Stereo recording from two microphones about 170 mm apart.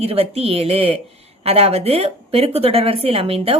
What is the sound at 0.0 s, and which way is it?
A woman's voice, 35° right (ahead or behind).